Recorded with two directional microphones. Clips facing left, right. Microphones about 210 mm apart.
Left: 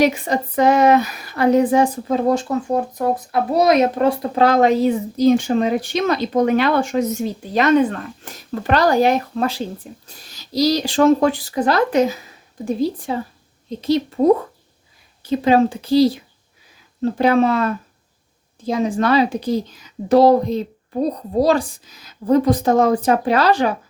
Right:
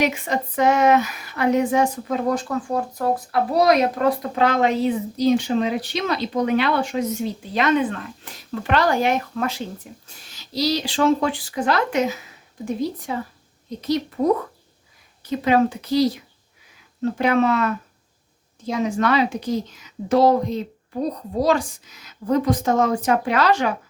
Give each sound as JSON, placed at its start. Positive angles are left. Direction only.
{"t": 0.0, "sound": "a child's voice", "side_deg": 35}